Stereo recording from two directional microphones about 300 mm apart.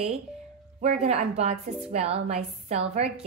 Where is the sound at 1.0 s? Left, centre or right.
Right.